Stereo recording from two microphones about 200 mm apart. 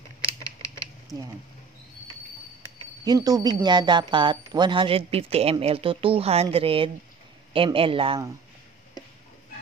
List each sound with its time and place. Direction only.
3.1 s speech: 20° right (ahead or behind)